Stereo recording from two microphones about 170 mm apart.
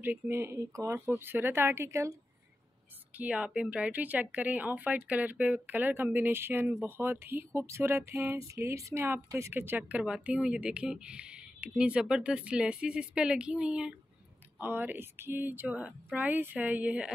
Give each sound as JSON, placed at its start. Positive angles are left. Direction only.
{"t": 0.0, "sound": "speech", "side_deg": -15}